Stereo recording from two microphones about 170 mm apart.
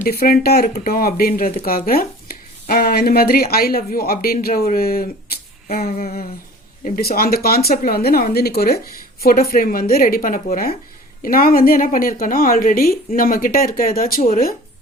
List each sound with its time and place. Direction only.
0.0 s a woman's voice: 65° left (ahead or behind)
5.6 s a sound: 45° left (ahead or behind)
6.8 s a woman's voice: 60° left (ahead or behind)